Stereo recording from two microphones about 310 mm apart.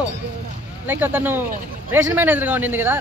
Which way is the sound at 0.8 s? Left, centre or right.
Centre.